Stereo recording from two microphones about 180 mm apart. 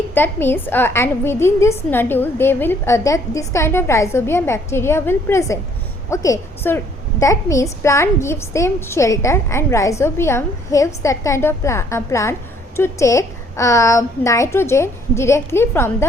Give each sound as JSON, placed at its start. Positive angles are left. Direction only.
{"t": 0.1, "sound": "a woman's voice", "side_deg": 10}